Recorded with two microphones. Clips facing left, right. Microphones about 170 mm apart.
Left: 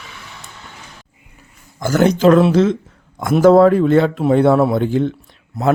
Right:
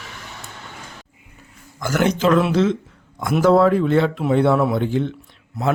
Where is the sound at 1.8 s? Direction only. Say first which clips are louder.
Left 6 dB; 30° left (ahead or behind).